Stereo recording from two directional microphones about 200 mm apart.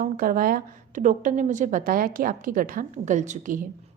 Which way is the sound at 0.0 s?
45° right (ahead or behind).